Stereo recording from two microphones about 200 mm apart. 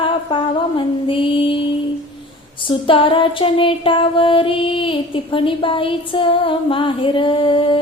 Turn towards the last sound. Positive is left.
turn(degrees=25)  # may be behind; listen again after turning